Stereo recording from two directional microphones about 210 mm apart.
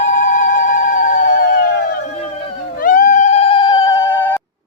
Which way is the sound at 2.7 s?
40° left (ahead or behind).